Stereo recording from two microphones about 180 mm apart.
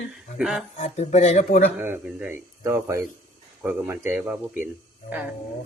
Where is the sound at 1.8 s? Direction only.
10° right (ahead or behind).